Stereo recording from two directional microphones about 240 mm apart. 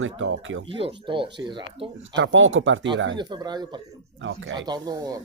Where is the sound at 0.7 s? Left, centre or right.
Right.